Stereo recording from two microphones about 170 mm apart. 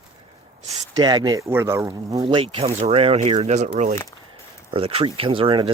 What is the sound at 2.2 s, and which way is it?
Speech, 30° right (ahead or behind).